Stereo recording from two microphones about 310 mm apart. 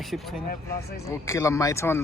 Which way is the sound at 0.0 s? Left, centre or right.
Centre.